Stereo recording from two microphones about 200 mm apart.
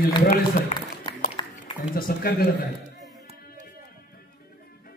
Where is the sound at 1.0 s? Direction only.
20° left (ahead or behind).